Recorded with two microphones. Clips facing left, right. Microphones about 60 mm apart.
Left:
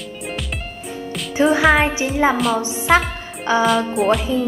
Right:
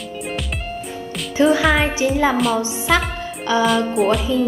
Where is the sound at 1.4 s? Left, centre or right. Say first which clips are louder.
Left 1 dB; left.